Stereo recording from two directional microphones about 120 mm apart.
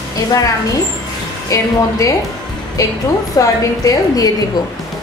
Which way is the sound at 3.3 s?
30° left (ahead or behind).